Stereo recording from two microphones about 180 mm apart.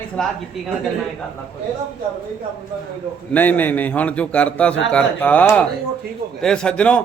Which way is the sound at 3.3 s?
10° left (ahead or behind).